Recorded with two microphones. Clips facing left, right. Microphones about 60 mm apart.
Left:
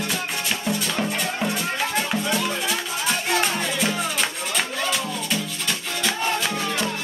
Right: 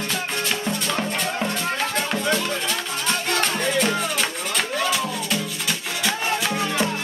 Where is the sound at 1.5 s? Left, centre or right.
Centre.